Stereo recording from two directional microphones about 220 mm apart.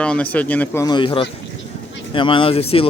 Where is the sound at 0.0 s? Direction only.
5° left (ahead or behind).